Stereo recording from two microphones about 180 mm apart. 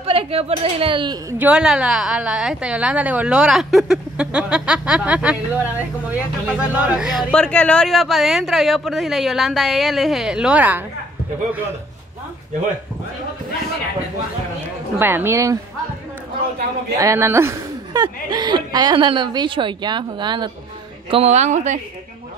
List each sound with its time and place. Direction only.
0.0 s a woman's voice: 30° right (ahead or behind)
1.4 s a woman's voice: 5° right (ahead or behind)
7.2 s a woman's voice: 5° left (ahead or behind)
15.0 s speech: 10° right (ahead or behind)
17.0 s speech: 15° right (ahead or behind)
21.1 s a woman's voice: 35° right (ahead or behind)